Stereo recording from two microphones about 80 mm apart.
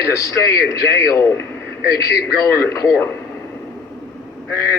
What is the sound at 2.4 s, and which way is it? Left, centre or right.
Speech, left.